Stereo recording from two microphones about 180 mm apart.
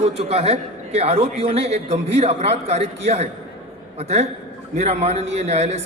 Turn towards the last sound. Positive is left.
turn(degrees=-35)  # may be behind; listen again after turning